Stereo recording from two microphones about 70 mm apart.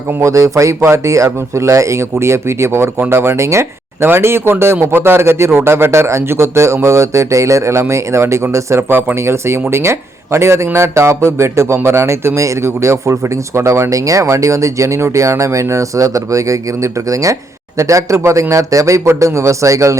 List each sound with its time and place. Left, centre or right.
0.1 s speech: right
8.9 s speech: right
9.1 s speech: right